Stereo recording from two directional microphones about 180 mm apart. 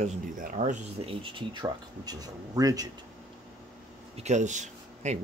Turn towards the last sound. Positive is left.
turn(degrees=-40)  # may be behind; listen again after turning